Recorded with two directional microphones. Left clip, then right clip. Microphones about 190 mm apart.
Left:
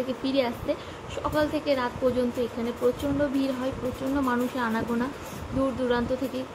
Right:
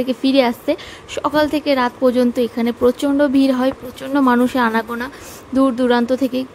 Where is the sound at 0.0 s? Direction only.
65° right (ahead or behind).